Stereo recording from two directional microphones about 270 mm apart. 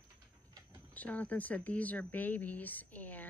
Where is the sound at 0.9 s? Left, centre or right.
Centre.